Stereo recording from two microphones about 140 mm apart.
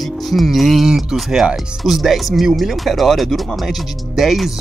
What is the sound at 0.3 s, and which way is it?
Speech, centre (ahead or behind).